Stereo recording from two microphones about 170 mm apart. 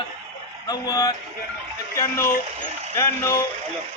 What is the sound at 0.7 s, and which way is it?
A man's voice, 20° left (ahead or behind).